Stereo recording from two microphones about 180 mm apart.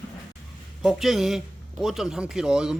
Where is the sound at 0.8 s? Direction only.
Centre (ahead or behind).